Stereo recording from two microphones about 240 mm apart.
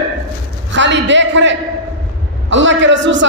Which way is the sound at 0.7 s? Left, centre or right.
Right.